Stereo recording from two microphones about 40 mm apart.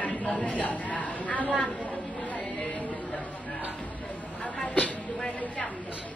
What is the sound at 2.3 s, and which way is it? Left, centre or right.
Music, left.